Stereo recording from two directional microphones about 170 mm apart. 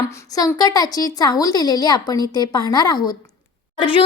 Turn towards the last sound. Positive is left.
turn(degrees=30)  # may be behind; listen again after turning